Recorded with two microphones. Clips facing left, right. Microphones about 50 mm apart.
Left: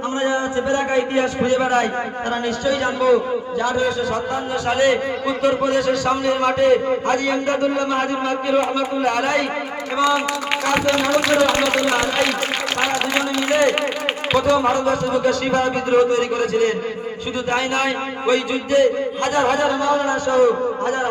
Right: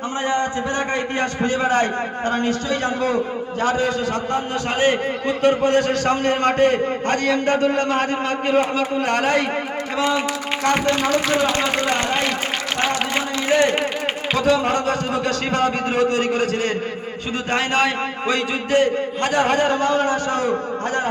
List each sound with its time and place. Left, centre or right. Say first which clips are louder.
1.5 s a man's voice: right 2 dB; right
5.4 s a man's voice: right 2 dB; right
14.3 s a man's voice: left 2 dB; right